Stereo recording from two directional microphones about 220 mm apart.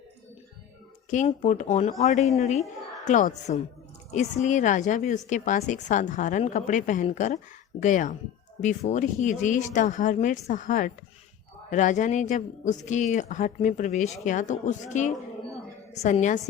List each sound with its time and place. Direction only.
1.1 s speech: 35° left (ahead or behind)